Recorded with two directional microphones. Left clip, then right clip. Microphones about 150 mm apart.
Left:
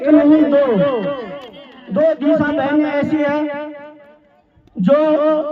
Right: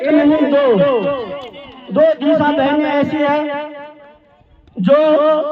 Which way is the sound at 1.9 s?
45° right (ahead or behind).